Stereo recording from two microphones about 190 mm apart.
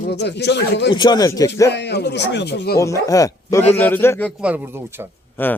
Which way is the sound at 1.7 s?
60° left (ahead or behind).